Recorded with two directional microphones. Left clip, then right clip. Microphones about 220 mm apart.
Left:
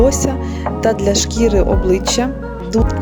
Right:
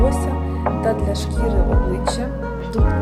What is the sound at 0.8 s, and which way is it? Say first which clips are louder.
Speech: left 10 dB; 40° left (ahead or behind).